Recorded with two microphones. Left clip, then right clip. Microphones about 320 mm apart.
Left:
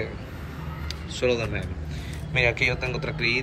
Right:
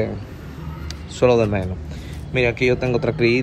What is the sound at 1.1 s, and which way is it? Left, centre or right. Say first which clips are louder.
Speech: right 9 dB; centre.